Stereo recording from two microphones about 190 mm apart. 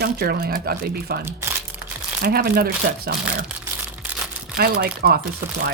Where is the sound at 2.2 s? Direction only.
55° right (ahead or behind).